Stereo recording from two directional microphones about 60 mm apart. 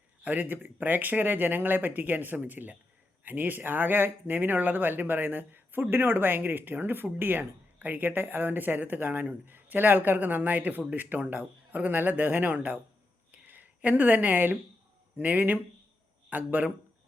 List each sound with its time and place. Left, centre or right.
0.2 s speech: right
11.3 s speech: centre
11.9 s a woman's voice: right